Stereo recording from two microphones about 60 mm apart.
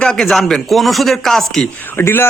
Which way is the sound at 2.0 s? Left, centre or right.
Left.